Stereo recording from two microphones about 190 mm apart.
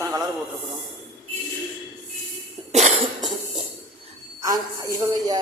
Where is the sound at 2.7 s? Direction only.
35° right (ahead or behind).